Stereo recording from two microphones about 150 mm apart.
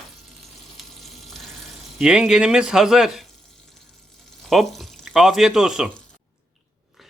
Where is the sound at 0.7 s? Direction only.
Centre (ahead or behind).